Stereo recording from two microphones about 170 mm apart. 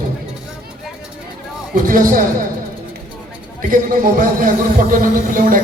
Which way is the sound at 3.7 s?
55° right (ahead or behind).